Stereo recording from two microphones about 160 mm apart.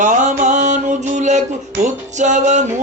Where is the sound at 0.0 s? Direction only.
50° right (ahead or behind).